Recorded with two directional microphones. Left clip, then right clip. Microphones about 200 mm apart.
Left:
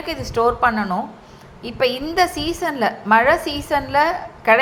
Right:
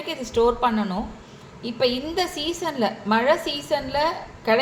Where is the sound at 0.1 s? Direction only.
10° left (ahead or behind).